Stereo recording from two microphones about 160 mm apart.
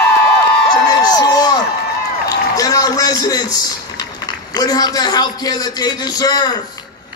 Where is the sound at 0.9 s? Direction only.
25° left (ahead or behind).